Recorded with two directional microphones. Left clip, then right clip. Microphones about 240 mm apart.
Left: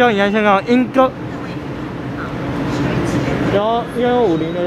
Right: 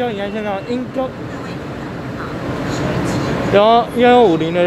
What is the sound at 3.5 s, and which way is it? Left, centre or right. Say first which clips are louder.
Speech: right 8 dB; right.